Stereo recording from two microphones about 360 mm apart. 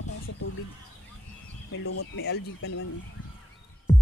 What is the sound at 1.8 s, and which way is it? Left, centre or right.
Speech, left.